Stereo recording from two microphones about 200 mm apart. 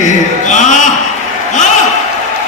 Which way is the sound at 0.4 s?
35° left (ahead or behind).